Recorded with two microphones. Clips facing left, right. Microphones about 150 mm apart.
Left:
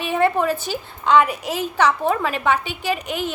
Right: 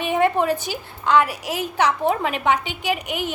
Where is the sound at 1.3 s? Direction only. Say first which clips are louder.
Left 2 dB; 10° right (ahead or behind).